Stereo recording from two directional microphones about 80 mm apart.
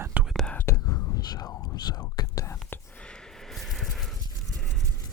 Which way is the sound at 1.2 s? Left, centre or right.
Left.